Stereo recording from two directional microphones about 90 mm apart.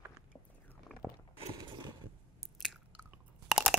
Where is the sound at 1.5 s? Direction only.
50° right (ahead or behind).